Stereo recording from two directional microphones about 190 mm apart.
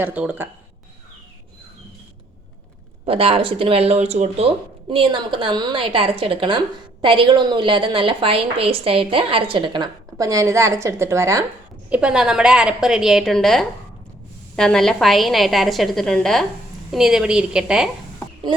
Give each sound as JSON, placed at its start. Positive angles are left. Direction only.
{"t": 0.0, "sound": "speech", "side_deg": -5}
{"t": 3.1, "sound": "a woman's voice", "side_deg": -30}